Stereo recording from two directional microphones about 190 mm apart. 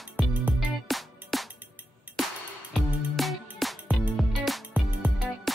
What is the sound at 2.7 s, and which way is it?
Music, centre (ahead or behind).